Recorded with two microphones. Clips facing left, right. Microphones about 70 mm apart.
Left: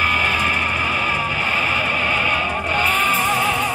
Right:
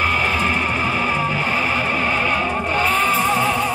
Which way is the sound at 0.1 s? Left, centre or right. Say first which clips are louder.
Even; left.